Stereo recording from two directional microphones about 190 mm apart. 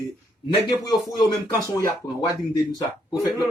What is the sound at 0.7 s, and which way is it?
Speech, 20° left (ahead or behind).